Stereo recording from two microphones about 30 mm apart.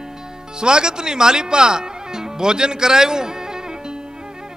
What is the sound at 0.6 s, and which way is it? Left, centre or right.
Speech, right.